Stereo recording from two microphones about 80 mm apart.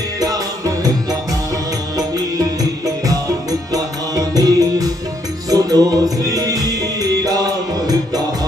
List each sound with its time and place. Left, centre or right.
0.2 s music: right
3.1 s music: right